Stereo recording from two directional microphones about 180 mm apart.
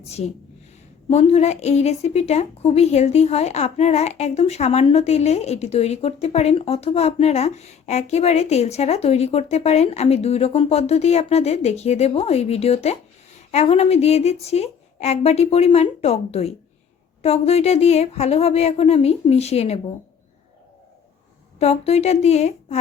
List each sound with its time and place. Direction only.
0.0 s a woman's voice: 35° left (ahead or behind)
21.6 s a woman's voice: 35° left (ahead or behind)